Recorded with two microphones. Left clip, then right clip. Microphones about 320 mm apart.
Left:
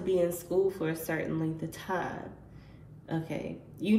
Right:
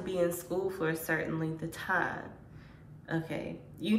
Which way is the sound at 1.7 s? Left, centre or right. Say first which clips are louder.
Right 7 dB; right.